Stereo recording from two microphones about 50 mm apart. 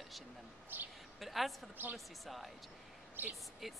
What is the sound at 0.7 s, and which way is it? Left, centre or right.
Speech, right.